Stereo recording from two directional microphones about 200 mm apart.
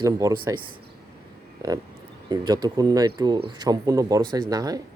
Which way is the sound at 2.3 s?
20° right (ahead or behind).